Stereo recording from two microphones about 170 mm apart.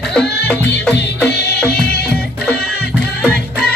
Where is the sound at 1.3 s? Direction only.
80° left.